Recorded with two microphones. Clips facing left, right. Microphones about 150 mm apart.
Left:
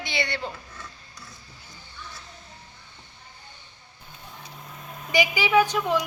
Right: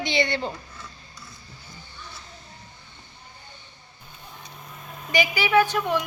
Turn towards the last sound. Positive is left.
turn(degrees=15)  # may be behind; listen again after turning